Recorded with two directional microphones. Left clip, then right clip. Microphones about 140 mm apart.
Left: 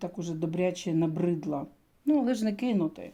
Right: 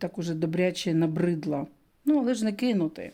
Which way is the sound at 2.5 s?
35° right (ahead or behind).